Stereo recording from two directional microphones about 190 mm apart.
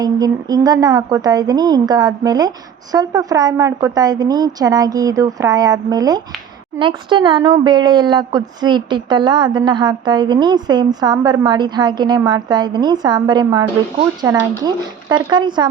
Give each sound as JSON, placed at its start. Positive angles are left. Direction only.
{"t": 0.0, "sound": "speech", "side_deg": -20}